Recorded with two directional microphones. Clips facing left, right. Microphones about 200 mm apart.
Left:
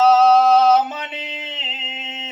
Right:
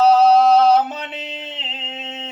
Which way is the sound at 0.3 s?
Centre (ahead or behind).